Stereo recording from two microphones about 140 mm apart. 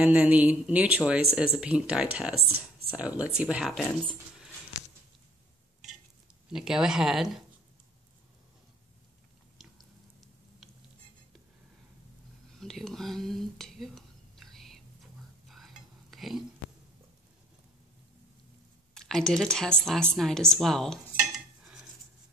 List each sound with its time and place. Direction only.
0.0 s speech: 10° right (ahead or behind)
6.5 s speech: 5° right (ahead or behind)
12.5 s a sound: centre (ahead or behind)
15.4 s stir: centre (ahead or behind)
18.9 s speech: 5° left (ahead or behind)